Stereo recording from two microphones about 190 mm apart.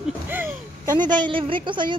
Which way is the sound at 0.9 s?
25° right (ahead or behind).